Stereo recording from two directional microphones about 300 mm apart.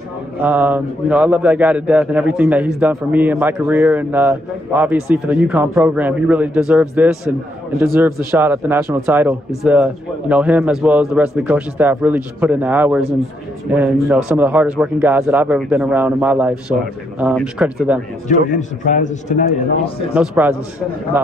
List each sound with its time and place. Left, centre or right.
0.4 s a man's voice: centre
18.3 s a man's voice: left
20.2 s a man's voice: centre